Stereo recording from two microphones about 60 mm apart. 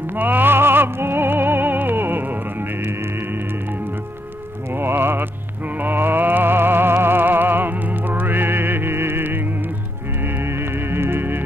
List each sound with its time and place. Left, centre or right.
0.1 s music: right
4.7 s music: right